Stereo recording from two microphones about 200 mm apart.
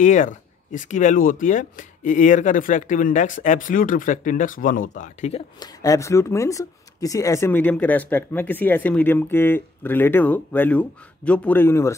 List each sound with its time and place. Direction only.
0.0 s speech: 40° left (ahead or behind)
5.6 s speech: 15° left (ahead or behind)